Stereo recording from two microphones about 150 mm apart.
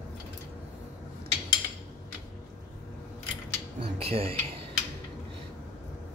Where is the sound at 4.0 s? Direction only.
40° right (ahead or behind).